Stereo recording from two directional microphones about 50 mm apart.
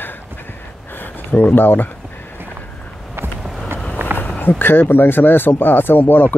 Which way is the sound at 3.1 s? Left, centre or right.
Right.